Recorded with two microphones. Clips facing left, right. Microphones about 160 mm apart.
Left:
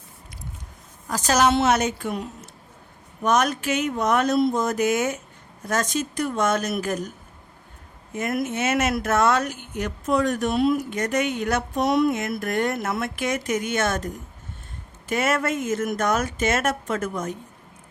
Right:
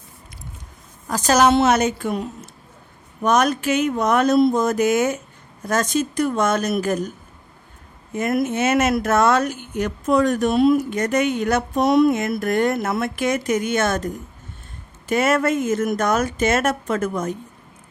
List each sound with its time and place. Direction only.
1.0 s a woman's voice: 50° right (ahead or behind)
3.2 s speech: 40° right (ahead or behind)
8.1 s speech: 35° right (ahead or behind)
15.1 s speech: 35° right (ahead or behind)